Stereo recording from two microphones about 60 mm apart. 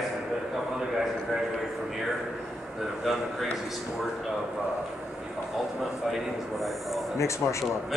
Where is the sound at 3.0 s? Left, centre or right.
Centre.